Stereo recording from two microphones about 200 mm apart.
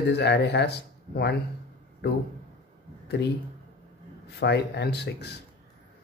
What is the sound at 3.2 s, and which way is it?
Speech, 60° left (ahead or behind).